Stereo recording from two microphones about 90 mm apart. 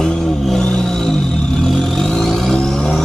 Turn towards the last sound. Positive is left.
turn(degrees=5)  # may be behind; listen again after turning